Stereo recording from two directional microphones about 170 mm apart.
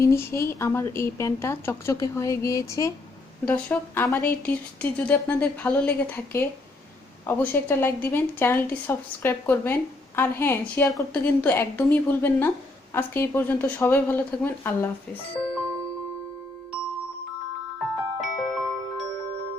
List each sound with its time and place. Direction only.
0.0 s a woman's voice: 15° left (ahead or behind)
18.2 s music: centre (ahead or behind)